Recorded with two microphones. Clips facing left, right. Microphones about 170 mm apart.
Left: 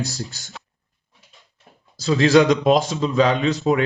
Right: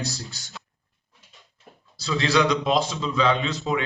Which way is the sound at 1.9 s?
45° left (ahead or behind).